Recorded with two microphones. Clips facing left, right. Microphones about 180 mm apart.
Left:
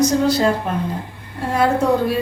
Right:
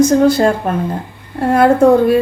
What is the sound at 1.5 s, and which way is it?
Speech, 55° right (ahead or behind).